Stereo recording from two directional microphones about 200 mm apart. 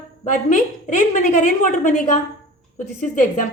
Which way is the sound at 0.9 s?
40° left (ahead or behind).